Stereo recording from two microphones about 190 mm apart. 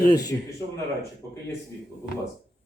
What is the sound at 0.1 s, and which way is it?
Speech, 20° left (ahead or behind).